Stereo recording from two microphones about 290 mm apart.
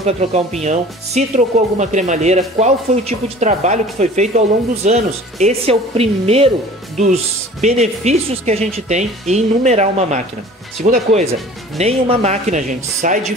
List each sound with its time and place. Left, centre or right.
0.0 s speech: right
7.6 s speech: right